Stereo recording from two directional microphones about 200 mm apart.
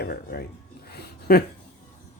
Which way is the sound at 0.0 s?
50° left (ahead or behind).